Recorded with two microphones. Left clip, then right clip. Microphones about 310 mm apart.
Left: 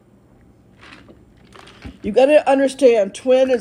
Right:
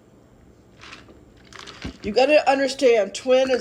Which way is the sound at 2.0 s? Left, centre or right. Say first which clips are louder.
Left 4 dB; left.